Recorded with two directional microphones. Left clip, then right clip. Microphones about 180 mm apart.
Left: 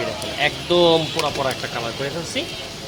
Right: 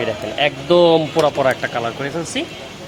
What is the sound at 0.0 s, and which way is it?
Speech, 60° right (ahead or behind).